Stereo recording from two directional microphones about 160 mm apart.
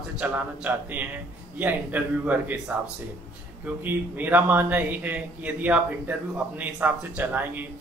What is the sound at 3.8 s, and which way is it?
A man's voice, 10° right (ahead or behind).